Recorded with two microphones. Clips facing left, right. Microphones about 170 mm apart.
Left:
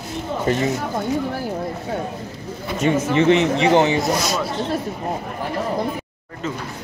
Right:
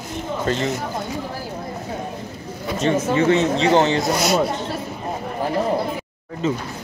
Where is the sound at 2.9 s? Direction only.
10° left (ahead or behind).